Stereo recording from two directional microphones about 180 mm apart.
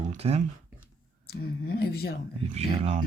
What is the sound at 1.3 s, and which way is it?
Speech, 60° left (ahead or behind).